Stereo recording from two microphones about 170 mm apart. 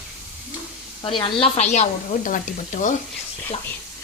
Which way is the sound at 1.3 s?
40° left (ahead or behind).